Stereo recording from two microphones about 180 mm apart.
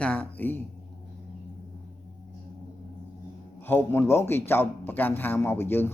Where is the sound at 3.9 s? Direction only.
15° left (ahead or behind).